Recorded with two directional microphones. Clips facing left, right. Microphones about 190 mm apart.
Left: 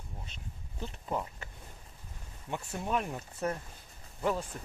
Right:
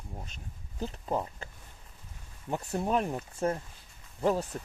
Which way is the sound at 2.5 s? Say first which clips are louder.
Right 4 dB; 35° right (ahead or behind).